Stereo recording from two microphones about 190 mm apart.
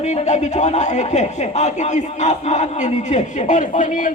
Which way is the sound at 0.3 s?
35° left (ahead or behind).